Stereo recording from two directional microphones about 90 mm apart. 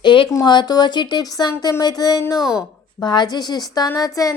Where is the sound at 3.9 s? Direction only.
40° left (ahead or behind).